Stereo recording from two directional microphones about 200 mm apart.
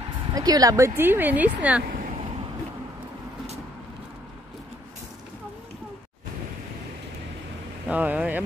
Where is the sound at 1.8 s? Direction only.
45° right (ahead or behind).